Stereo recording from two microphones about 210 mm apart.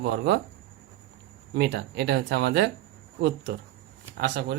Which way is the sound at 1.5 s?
55° right (ahead or behind).